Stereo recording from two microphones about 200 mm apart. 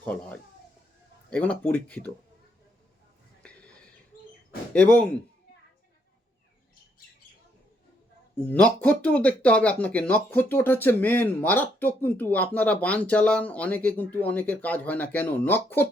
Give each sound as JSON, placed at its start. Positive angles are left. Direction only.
{"t": 0.0, "sound": "speech", "side_deg": 5}
{"t": 3.4, "sound": "a sound", "side_deg": 5}
{"t": 4.7, "sound": "speech", "side_deg": 5}
{"t": 8.4, "sound": "speech", "side_deg": 5}